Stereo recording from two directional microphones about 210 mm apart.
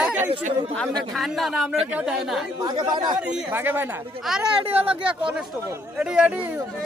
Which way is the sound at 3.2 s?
5° right (ahead or behind).